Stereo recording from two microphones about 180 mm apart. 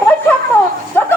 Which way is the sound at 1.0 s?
10° left (ahead or behind).